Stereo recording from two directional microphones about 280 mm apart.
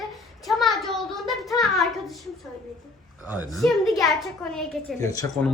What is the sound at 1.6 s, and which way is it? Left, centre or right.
Hands, centre.